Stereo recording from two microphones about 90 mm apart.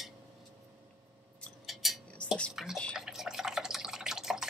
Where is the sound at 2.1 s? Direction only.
15° left (ahead or behind).